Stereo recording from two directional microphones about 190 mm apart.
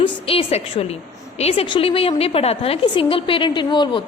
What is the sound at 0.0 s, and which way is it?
A woman's voice, 30° left (ahead or behind).